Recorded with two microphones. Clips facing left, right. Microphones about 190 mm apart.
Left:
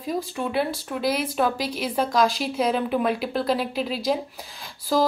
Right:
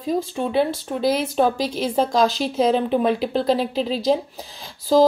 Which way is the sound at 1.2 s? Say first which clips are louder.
Right 4 dB; 30° right (ahead or behind).